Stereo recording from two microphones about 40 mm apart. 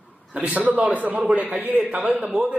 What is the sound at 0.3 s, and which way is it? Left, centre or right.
A man's voice, right.